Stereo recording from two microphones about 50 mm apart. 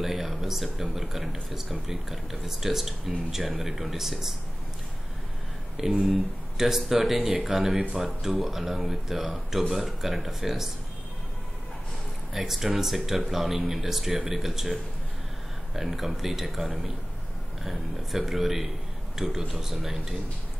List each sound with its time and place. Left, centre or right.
0.0 s speech: centre
5.8 s speech: centre
12.4 s speech: centre